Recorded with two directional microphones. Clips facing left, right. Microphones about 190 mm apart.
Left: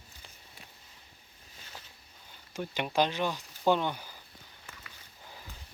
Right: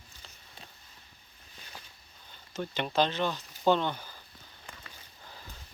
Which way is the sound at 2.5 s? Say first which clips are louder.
Right 1 dB; 10° left (ahead or behind).